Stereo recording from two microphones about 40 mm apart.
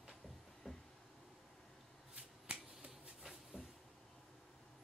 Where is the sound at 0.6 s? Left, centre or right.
Centre.